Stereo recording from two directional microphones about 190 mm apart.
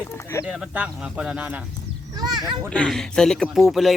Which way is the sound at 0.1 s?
15° left (ahead or behind).